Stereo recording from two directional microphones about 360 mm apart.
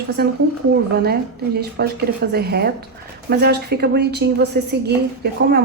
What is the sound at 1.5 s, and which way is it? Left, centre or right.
A woman's voice, right.